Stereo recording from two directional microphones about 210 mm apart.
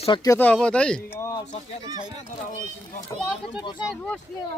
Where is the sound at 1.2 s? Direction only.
15° left (ahead or behind).